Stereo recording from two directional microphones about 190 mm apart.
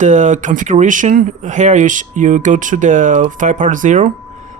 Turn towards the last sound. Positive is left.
turn(degrees=-40)  # may be behind; listen again after turning